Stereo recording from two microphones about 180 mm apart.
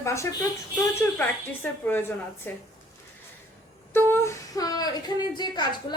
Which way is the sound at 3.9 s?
15° left (ahead or behind).